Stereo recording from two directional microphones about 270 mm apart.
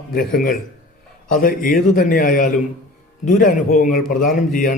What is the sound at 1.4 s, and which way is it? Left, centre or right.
A man's voice, left.